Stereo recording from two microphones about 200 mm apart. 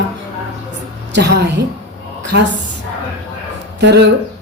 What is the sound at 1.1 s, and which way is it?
Speech, 60° right (ahead or behind).